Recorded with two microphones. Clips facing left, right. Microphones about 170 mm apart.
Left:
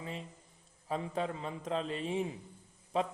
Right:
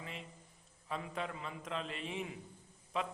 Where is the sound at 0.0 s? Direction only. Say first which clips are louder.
Left 5 dB; 35° left (ahead or behind).